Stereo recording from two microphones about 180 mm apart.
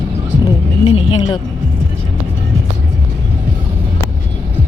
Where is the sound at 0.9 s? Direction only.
30° left (ahead or behind).